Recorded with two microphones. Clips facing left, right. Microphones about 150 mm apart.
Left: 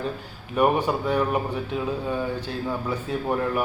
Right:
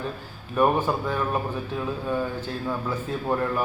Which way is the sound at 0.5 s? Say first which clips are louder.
Left 1 dB; 15° left (ahead or behind).